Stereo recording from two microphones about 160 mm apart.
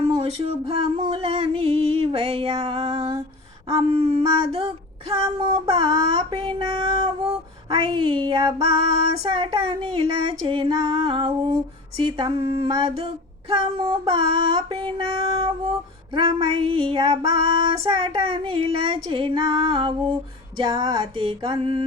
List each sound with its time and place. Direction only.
0.0 s female singing: 40° right (ahead or behind)